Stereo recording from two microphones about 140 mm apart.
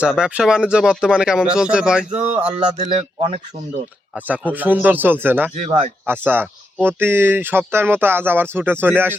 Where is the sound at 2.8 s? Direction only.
45° right (ahead or behind).